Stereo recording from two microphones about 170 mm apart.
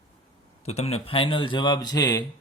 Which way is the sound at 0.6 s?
40° left (ahead or behind).